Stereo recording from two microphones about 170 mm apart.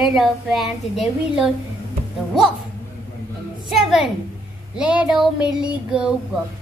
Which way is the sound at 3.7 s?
Centre (ahead or behind).